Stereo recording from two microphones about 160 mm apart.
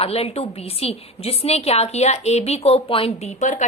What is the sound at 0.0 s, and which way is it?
A woman's voice, 35° left (ahead or behind).